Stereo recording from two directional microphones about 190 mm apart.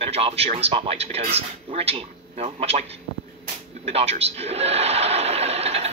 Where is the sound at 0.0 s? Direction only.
30° right (ahead or behind).